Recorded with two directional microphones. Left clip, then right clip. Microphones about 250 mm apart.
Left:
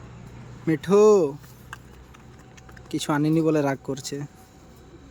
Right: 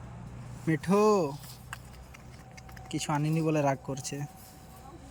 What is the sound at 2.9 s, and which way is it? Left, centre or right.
Speech, centre.